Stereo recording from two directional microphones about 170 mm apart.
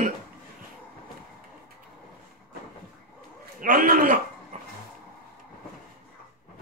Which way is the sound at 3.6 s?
55° right (ahead or behind).